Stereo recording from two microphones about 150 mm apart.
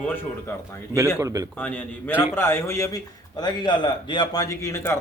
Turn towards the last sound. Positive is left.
turn(degrees=20)  # may be behind; listen again after turning